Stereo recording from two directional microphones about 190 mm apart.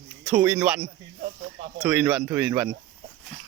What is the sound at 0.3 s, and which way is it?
Speech, 5° right (ahead or behind).